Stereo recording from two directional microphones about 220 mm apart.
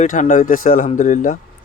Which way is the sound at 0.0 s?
35° left (ahead or behind).